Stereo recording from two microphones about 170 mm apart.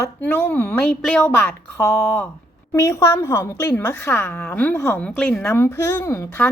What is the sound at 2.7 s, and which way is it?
A woman's voice, 15° left (ahead or behind).